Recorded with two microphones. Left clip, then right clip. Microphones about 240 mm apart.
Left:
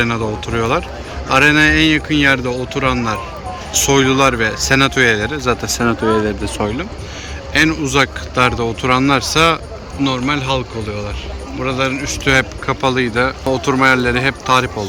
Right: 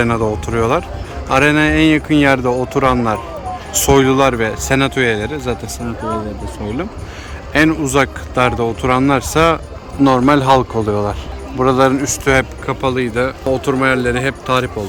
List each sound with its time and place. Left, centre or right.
0.0 s speech: centre
7.5 s speech: centre
10.0 s a man's voice: right
12.3 s speech: centre